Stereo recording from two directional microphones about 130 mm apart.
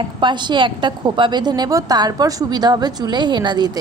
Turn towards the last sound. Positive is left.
turn(degrees=-35)  # may be behind; listen again after turning